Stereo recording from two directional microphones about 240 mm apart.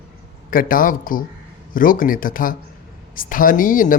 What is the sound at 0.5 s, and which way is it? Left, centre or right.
Speech, left.